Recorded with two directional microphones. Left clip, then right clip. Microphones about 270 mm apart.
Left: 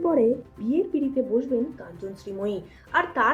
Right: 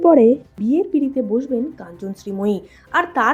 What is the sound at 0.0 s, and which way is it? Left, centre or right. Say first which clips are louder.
A woman's voice: right 10 dB; right.